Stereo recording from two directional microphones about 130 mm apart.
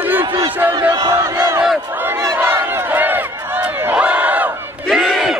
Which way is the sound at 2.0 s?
20° right (ahead or behind).